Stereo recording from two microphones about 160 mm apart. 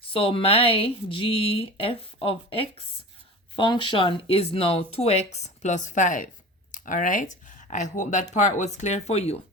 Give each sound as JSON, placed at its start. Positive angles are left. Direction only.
{"t": 0.1, "sound": "speech", "side_deg": 35}